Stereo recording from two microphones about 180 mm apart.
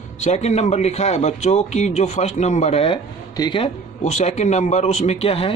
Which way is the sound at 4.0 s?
40° left (ahead or behind).